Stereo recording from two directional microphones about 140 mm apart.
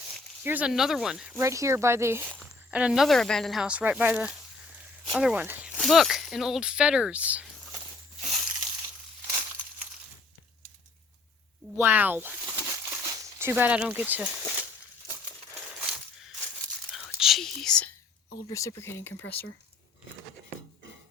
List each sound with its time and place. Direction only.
0.4 s speech: 10° right (ahead or behind)
1.4 s speech: 20° right (ahead or behind)
2.2 s speech: 5° left (ahead or behind)
2.6 s speech: 5° right (ahead or behind)
5.7 s speech: centre (ahead or behind)
8.2 s a sound: 5° right (ahead or behind)
11.8 s crumpling: 15° right (ahead or behind)
16.9 s whispering: centre (ahead or behind)
18.4 s speech: 20° left (ahead or behind)